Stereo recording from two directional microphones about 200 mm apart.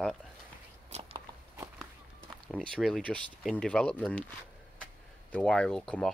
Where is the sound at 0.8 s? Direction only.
30° right (ahead or behind).